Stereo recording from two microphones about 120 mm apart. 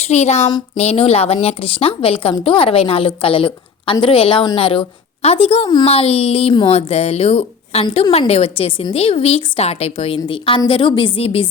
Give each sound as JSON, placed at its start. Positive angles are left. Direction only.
{"t": 0.0, "sound": "a woman's voice", "side_deg": 65}
{"t": 6.7, "sound": "a woman's voice", "side_deg": 55}